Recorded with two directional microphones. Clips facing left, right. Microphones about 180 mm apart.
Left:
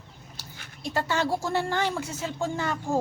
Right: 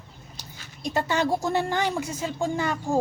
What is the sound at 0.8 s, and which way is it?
A woman's voice, 15° right (ahead or behind).